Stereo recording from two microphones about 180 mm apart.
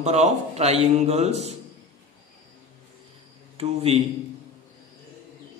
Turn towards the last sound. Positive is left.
turn(degrees=-35)  # may be behind; listen again after turning